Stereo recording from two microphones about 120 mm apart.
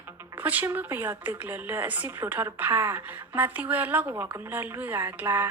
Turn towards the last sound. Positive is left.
turn(degrees=-20)  # may be behind; listen again after turning